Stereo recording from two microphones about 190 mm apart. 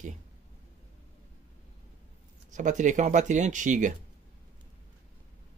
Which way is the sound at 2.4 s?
40° right (ahead or behind).